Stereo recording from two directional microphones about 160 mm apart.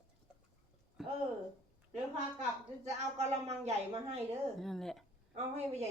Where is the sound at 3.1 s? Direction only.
45° right (ahead or behind).